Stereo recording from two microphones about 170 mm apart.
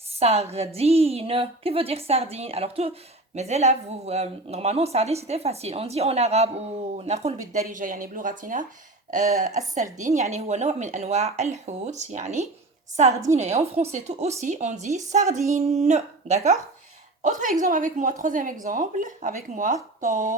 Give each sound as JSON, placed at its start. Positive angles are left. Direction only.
{"t": 0.2, "sound": "speech", "side_deg": -35}
{"t": 7.7, "sound": "a woman's voice", "side_deg": -50}